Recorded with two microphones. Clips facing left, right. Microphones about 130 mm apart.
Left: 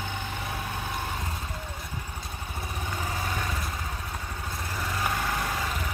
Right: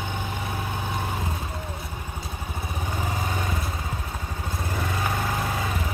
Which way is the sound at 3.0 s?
20° right (ahead or behind).